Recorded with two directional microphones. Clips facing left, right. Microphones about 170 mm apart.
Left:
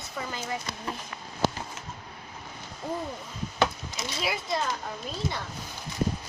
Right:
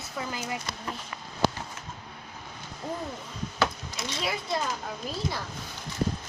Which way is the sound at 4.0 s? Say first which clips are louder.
Even; centre (ahead or behind).